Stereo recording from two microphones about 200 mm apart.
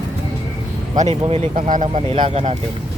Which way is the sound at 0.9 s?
30° right (ahead or behind).